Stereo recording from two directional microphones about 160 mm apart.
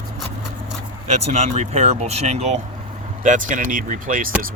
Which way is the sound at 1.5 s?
40° right (ahead or behind).